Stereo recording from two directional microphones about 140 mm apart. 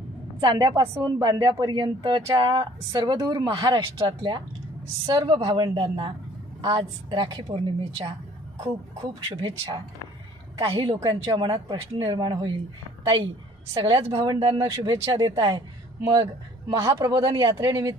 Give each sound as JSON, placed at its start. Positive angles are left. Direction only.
{"t": 0.4, "sound": "speech", "side_deg": -30}
{"t": 9.3, "sound": "speech", "side_deg": -35}
{"t": 13.7, "sound": "speech", "side_deg": -40}